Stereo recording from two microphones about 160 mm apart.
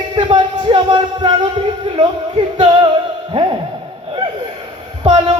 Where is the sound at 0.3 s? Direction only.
30° right (ahead or behind).